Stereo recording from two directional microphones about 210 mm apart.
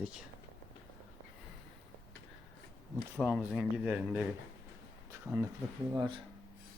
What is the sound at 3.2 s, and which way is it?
Speech, centre (ahead or behind).